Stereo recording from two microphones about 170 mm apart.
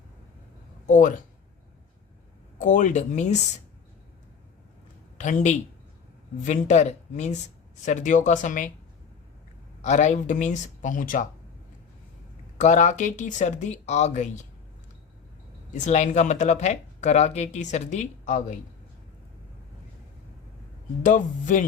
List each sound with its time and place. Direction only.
0.9 s speech: 50° left (ahead or behind)
2.6 s speech: 45° left (ahead or behind)
5.1 s speech: 45° left (ahead or behind)
9.8 s speech: 45° left (ahead or behind)
12.5 s speech: 45° left (ahead or behind)
15.7 s speech: 45° left (ahead or behind)
21.0 s speech: 50° left (ahead or behind)